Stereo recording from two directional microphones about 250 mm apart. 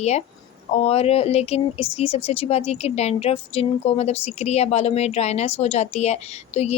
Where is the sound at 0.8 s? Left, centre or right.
Left.